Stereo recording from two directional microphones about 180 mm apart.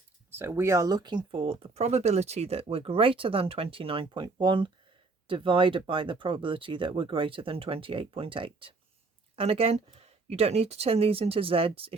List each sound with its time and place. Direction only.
0.3 s speech: 15° right (ahead or behind); by 11.9 s 30° right (ahead or behind)